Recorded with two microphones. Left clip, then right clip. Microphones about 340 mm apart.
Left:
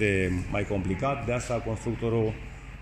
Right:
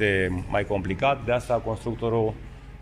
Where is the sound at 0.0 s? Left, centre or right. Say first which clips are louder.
Right 3 dB; right.